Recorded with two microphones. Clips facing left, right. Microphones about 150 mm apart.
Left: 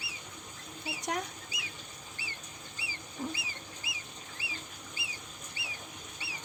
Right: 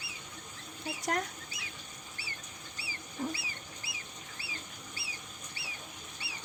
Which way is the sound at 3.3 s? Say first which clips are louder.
Even; 15° left (ahead or behind).